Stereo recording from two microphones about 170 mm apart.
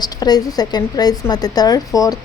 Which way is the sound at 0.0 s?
25° left (ahead or behind).